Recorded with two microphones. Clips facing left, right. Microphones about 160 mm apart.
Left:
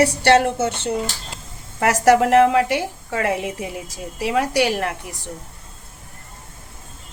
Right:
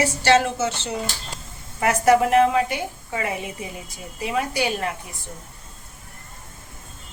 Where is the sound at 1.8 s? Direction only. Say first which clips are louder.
Left 2 dB; 80° left.